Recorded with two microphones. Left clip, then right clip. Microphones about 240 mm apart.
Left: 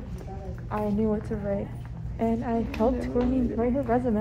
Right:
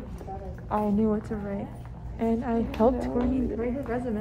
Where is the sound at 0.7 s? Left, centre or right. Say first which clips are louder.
Right 1 dB; centre.